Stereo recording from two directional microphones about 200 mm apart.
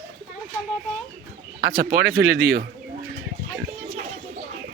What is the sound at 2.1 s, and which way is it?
Speech, 60° right (ahead or behind).